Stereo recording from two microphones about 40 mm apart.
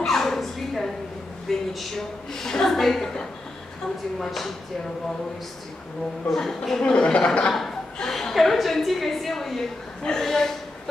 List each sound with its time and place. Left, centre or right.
0.0 s a sound: centre
1.7 s a woman's voice: centre
6.3 s a woman's voice: centre
6.8 s speech: left
8.1 s a woman's voice: centre